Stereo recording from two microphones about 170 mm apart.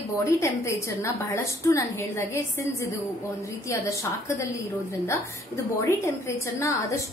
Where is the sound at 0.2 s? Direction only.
15° left (ahead or behind).